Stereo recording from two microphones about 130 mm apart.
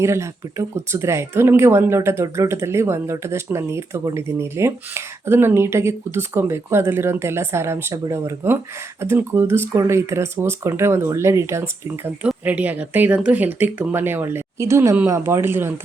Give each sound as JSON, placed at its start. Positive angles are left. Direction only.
{"t": 0.0, "sound": "speech", "side_deg": -20}